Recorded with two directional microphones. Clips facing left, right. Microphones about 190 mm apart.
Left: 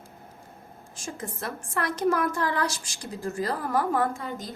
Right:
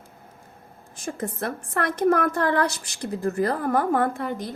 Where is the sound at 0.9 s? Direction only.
60° right (ahead or behind).